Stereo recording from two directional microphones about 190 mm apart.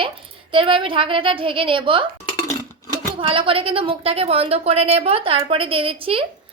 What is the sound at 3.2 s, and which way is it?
A woman's voice, 25° right (ahead or behind).